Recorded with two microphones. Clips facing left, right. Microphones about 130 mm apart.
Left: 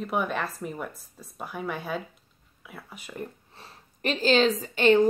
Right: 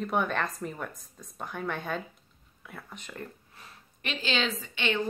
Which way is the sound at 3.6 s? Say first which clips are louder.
Left 7 dB; 35° left (ahead or behind).